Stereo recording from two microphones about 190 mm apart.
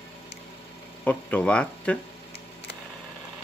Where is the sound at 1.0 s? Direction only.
5° left (ahead or behind).